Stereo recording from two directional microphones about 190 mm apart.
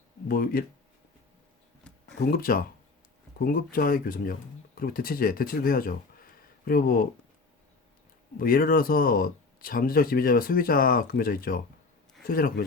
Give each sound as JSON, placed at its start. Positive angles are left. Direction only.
{"t": 0.3, "sound": "speech", "side_deg": 50}
{"t": 2.2, "sound": "speech", "side_deg": 50}
{"t": 8.4, "sound": "speech", "side_deg": 50}